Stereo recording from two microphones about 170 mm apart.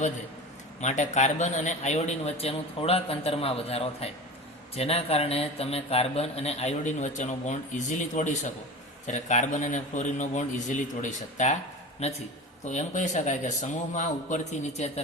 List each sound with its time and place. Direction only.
0.8 s a man's voice: 45° left (ahead or behind)